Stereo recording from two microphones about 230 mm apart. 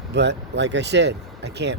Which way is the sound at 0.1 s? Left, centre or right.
Right.